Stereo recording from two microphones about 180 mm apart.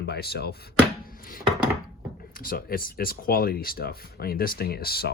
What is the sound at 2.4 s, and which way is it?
Speech, 55° left (ahead or behind).